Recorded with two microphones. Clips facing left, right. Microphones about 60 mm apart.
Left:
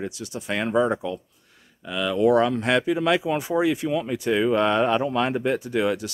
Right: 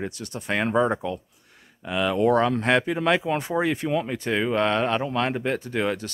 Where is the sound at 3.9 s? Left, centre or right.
Centre.